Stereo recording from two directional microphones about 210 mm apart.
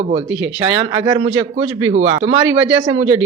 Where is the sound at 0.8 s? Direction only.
20° right (ahead or behind).